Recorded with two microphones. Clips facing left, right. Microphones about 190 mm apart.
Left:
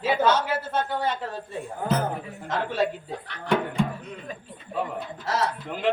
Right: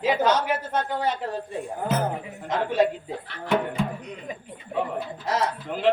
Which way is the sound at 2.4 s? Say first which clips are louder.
Right 4 dB; 15° right (ahead or behind).